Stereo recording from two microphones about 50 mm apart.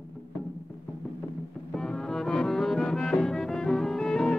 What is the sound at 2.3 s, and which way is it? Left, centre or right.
Music, centre.